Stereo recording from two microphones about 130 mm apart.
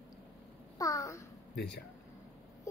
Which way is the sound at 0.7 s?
25° left (ahead or behind).